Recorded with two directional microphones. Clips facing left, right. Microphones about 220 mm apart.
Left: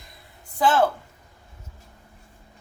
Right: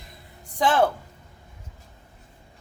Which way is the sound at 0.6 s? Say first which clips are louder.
Left 1 dB; 15° right (ahead or behind).